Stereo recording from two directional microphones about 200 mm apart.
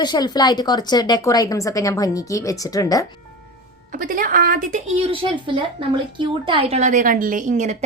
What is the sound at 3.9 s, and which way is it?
A woman's voice, 45° right (ahead or behind).